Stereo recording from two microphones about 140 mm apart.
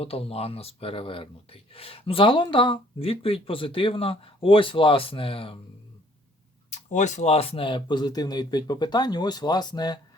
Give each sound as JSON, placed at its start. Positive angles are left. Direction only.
{"t": 0.0, "sound": "speech", "side_deg": 45}
{"t": 6.7, "sound": "speech", "side_deg": 60}